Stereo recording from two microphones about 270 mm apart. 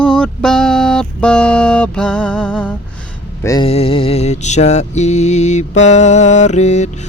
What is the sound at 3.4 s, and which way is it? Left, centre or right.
Mantra, centre.